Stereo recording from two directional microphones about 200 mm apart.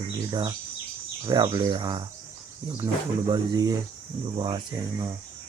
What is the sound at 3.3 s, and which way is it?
Speech, 20° right (ahead or behind).